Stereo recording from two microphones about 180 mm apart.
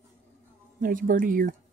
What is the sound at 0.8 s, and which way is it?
Speech, 50° right (ahead or behind).